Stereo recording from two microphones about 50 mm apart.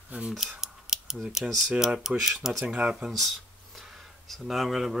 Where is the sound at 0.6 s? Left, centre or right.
Centre.